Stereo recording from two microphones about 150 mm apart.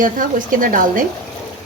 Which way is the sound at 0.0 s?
65° right (ahead or behind).